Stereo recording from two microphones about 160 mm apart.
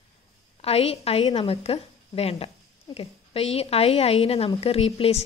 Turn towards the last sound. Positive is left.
turn(degrees=40)  # may be behind; listen again after turning